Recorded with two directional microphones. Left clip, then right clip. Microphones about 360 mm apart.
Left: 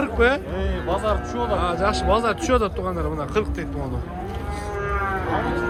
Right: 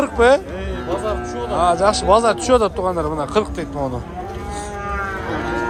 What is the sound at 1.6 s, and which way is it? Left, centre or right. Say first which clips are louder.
Speech: right 12 dB; centre.